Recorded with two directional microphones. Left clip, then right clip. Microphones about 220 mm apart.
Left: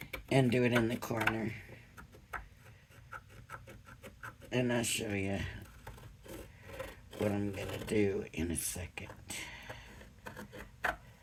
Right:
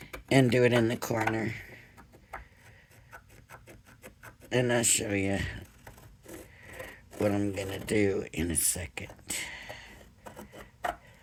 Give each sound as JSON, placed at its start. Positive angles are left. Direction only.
{"t": 0.3, "sound": "speech", "side_deg": -45}
{"t": 1.4, "sound": "a sound", "side_deg": -45}
{"t": 4.4, "sound": "speech", "side_deg": -45}
{"t": 7.2, "sound": "speech", "side_deg": -45}